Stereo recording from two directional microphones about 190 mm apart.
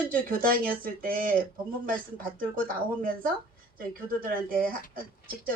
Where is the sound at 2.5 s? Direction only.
45° right (ahead or behind).